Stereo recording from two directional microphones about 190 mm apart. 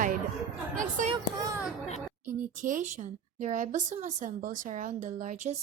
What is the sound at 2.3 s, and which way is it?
Speech, 45° right (ahead or behind).